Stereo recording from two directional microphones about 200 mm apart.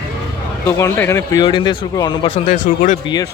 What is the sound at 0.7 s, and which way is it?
Speech, 10° left (ahead or behind).